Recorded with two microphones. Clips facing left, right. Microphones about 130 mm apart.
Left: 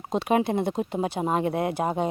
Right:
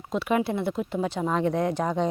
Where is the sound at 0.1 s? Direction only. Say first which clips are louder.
Left 2 dB; 20° left (ahead or behind).